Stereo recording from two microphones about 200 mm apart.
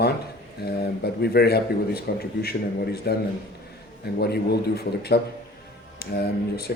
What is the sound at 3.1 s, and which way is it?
Speech, 55° left (ahead or behind).